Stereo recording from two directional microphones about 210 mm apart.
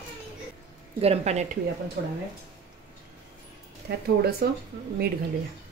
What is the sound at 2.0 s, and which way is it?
Speech, 45° right (ahead or behind).